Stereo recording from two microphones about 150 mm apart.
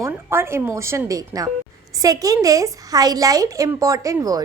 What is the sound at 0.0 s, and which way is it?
A woman's voice, 15° right (ahead or behind).